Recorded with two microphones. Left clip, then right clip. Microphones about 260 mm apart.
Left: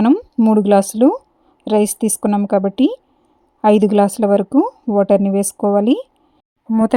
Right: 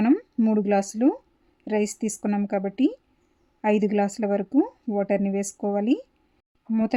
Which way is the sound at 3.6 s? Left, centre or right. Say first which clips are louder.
Left 10 dB; left.